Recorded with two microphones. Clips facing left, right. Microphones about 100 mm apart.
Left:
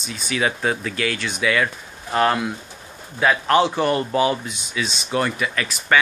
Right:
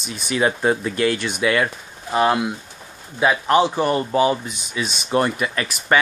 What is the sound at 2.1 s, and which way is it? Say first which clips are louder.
Speech: right 1 dB; 15° right (ahead or behind).